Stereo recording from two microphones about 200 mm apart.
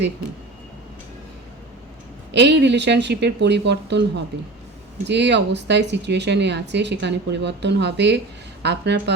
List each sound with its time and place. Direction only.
2.3 s speech: 60° right (ahead or behind)
5.0 s speech: 60° right (ahead or behind)